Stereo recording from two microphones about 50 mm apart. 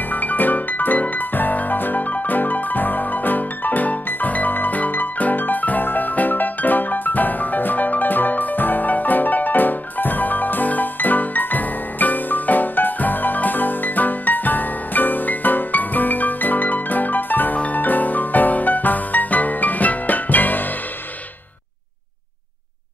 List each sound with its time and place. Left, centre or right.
0.1 s music: left